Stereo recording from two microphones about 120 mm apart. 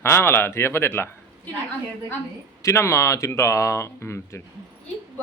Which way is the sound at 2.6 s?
25° left (ahead or behind).